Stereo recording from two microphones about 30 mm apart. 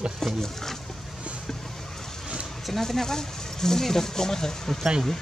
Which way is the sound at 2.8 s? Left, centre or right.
Centre.